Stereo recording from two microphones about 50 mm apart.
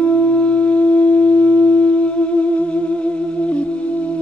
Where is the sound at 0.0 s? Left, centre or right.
Left.